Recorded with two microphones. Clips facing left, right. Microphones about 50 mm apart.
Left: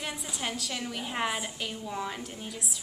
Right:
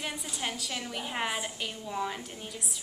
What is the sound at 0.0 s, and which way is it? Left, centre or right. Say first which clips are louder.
A woman's voice: even; centre.